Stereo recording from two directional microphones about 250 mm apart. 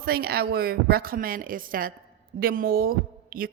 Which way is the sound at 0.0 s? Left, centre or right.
Right.